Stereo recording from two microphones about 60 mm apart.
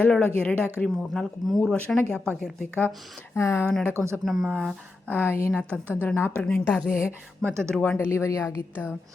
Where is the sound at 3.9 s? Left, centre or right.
Right.